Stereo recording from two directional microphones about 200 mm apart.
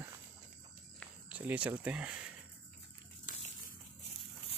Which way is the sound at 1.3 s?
5° right (ahead or behind).